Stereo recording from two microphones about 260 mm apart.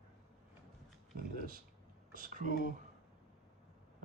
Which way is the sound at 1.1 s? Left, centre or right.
Right.